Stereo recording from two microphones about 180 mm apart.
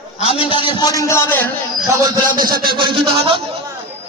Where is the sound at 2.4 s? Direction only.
55° right (ahead or behind).